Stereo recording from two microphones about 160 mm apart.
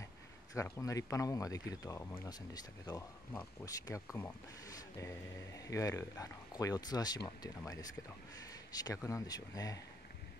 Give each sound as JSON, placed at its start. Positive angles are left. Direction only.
{"t": 0.6, "sound": "speech", "side_deg": 20}